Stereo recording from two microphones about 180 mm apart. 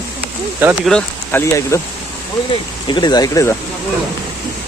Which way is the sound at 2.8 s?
25° left (ahead or behind).